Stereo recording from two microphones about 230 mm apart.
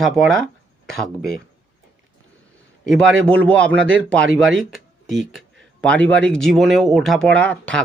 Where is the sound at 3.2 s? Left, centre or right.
Centre.